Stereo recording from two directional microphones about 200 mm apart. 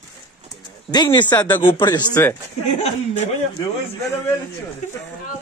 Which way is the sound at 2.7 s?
30° left (ahead or behind).